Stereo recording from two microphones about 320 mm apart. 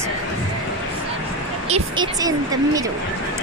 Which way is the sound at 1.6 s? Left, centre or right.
Centre.